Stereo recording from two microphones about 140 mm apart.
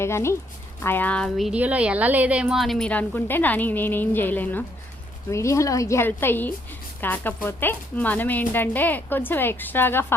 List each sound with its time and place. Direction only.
0.0 s a woman's voice: 20° left (ahead or behind)